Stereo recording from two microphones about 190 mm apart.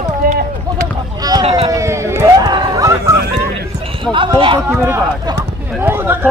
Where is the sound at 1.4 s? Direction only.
30° right (ahead or behind).